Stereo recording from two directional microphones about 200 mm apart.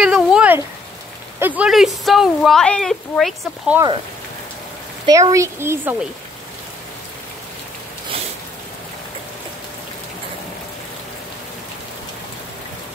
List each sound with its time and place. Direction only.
0.0 s a sound: 5° right (ahead or behind)
1.4 s speech: 5° right (ahead or behind)
5.0 s speech: 15° right (ahead or behind)